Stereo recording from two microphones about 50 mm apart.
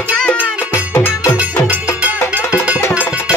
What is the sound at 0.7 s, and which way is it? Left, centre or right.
Music, left.